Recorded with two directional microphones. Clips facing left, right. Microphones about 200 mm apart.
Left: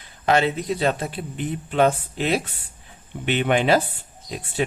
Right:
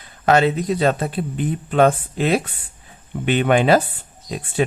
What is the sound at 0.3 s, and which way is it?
Speech, 45° right (ahead or behind).